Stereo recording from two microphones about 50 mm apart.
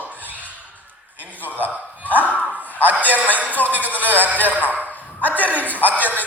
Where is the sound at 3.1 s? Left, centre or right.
Right.